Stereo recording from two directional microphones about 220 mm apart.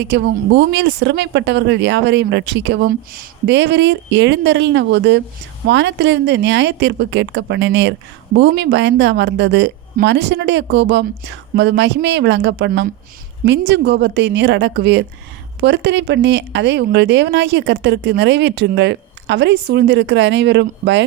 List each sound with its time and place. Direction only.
0.0 s a woman's voice: 50° right (ahead or behind)